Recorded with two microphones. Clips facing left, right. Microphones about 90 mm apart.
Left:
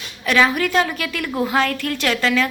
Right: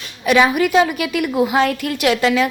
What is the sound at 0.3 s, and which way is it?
A woman's voice, 15° right (ahead or behind).